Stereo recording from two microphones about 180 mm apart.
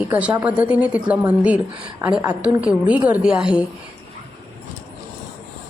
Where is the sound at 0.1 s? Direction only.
10° right (ahead or behind).